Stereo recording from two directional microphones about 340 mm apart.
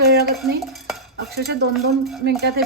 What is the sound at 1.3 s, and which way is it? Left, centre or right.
Speech, right.